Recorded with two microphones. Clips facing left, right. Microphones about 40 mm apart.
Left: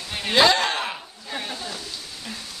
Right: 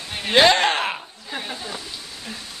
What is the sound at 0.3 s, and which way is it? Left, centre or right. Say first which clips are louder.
Speech: right 2 dB; right.